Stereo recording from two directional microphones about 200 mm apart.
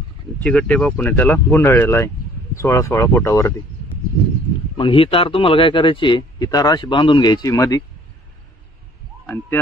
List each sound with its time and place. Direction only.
0.4 s speech: 5° left (ahead or behind)
4.7 s speech: 25° left (ahead or behind)
9.2 s speech: 10° left (ahead or behind)